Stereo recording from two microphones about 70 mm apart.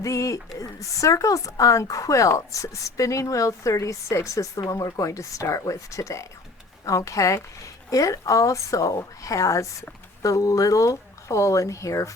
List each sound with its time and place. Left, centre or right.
0.0 s speech: left